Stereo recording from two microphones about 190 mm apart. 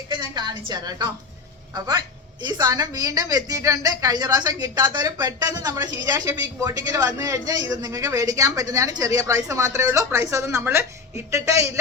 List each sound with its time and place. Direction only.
0.1 s a woman's voice: 25° right (ahead or behind)
2.4 s a woman's voice: 20° right (ahead or behind)